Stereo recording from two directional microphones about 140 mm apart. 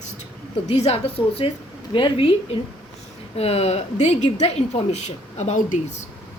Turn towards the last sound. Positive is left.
turn(degrees=55)  # may be behind; listen again after turning